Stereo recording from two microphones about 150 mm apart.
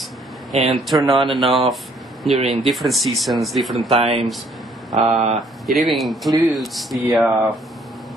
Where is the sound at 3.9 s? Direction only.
40° right (ahead or behind).